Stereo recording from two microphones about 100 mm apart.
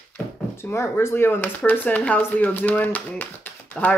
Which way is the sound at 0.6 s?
25° left (ahead or behind).